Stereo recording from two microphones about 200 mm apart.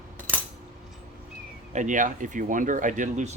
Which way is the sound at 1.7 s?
40° right (ahead or behind).